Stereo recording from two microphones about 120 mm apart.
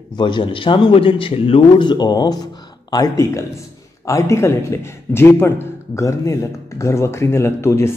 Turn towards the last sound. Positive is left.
turn(degrees=20)  # may be behind; listen again after turning